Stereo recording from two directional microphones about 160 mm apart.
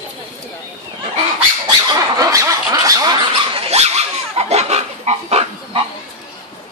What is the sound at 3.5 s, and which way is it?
Dog, 40° right (ahead or behind).